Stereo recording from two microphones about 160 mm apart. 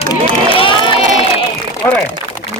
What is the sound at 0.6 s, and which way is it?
Crowd, 30° left (ahead or behind).